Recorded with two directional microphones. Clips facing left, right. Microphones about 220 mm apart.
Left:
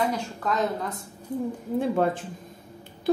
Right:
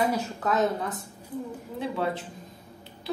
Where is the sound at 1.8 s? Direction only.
50° left (ahead or behind).